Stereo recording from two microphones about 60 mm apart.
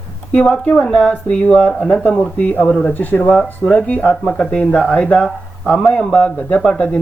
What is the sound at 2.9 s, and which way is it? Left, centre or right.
Speech, left.